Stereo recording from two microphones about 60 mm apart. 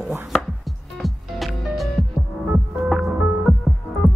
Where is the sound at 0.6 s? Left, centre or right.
Centre.